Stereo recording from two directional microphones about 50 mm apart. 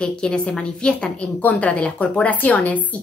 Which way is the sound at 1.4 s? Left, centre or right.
Left.